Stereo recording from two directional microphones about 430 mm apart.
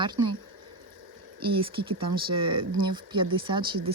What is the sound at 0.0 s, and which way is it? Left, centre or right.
Speech, centre.